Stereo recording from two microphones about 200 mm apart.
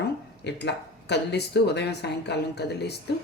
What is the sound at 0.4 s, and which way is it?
A man's voice, 60° left (ahead or behind).